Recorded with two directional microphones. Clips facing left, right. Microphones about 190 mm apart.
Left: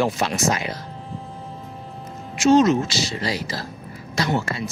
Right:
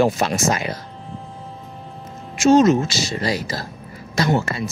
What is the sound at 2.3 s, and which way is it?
Speech, 45° right (ahead or behind).